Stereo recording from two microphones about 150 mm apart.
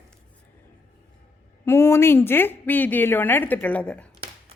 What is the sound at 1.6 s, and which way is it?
Speech, 15° left (ahead or behind).